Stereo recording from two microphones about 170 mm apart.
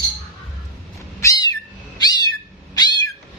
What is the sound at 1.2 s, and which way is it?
Cat, 20° left (ahead or behind).